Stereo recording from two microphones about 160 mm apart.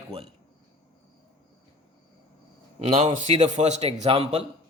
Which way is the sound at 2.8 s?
40° right (ahead or behind).